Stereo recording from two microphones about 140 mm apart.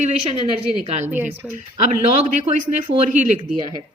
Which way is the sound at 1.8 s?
50° right (ahead or behind).